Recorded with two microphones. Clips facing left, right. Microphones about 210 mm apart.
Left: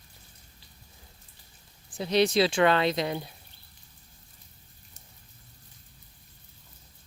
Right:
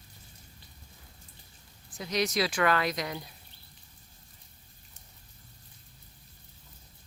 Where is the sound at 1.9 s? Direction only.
30° left (ahead or behind).